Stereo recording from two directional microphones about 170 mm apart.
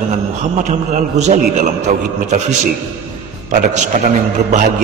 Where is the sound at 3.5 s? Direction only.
45° right (ahead or behind).